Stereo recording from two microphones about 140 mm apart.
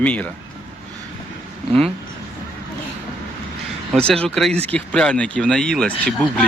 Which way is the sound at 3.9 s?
5° left (ahead or behind).